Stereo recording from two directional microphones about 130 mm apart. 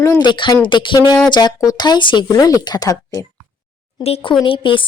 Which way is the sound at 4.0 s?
45° left (ahead or behind).